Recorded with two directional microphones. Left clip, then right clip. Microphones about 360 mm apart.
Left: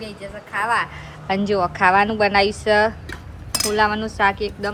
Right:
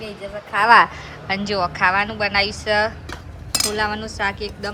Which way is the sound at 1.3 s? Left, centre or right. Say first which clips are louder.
Left 2 dB; centre.